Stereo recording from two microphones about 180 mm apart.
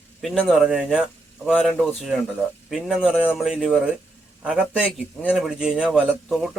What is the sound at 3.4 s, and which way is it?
A man's voice, 5° right (ahead or behind).